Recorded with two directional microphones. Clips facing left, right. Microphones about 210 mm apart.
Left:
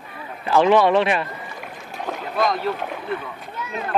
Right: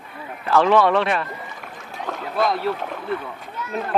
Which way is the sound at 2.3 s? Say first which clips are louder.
Even; 5° right (ahead or behind).